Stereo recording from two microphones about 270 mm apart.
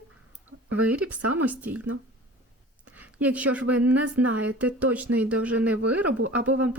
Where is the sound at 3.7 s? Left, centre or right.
Centre.